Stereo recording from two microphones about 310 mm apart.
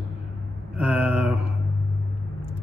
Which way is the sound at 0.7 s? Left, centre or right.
Centre.